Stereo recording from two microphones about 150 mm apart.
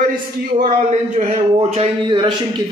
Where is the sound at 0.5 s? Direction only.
55° right (ahead or behind).